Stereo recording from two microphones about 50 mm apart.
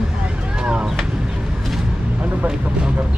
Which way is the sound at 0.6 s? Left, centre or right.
Centre.